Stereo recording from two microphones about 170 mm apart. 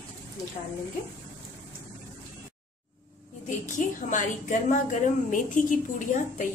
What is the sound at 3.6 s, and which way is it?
A woman's voice, 45° left (ahead or behind).